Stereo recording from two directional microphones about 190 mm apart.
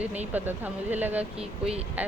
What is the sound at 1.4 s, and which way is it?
Speech, 30° right (ahead or behind).